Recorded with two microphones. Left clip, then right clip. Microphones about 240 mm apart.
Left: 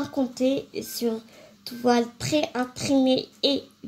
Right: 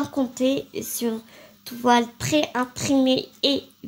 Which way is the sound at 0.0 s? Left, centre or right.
Right.